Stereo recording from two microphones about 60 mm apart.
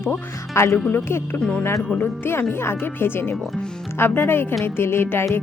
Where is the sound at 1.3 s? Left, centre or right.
Centre.